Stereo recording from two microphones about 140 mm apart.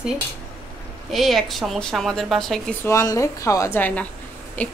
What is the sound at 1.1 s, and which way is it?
A woman's voice, centre (ahead or behind).